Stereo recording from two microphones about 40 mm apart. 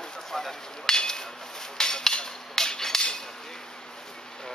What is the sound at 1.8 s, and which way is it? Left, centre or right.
Hammer, centre.